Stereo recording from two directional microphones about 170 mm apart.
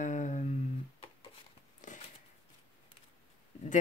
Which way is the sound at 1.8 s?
50° left (ahead or behind).